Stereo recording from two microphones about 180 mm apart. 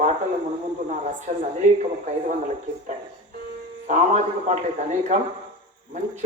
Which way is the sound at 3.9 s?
40° right (ahead or behind).